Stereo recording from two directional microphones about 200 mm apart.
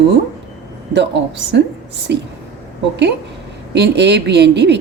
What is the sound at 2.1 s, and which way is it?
Speech, 55° right (ahead or behind).